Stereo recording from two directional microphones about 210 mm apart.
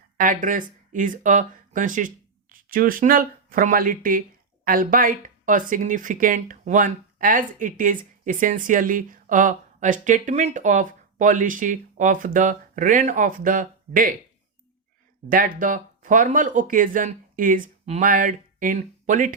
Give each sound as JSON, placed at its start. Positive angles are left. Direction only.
{"t": 0.2, "sound": "speech", "side_deg": -40}
{"t": 15.3, "sound": "speech", "side_deg": -40}